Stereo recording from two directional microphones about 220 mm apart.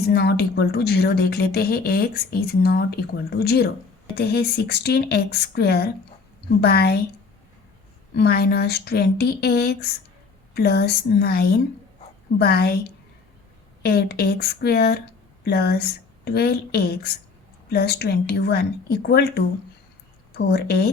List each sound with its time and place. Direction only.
0.1 s speech: 45° left (ahead or behind)
8.1 s speech: 45° left (ahead or behind)
13.8 s speech: 45° left (ahead or behind)